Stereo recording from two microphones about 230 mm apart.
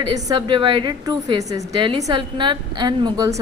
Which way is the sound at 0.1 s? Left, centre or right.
Centre.